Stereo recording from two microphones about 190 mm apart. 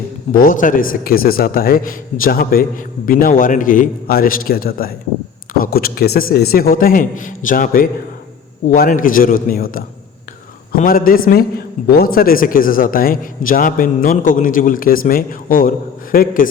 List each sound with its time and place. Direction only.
0.3 s a man's voice: 45° left (ahead or behind)